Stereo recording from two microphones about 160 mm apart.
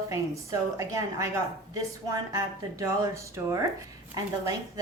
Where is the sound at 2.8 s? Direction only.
20° right (ahead or behind).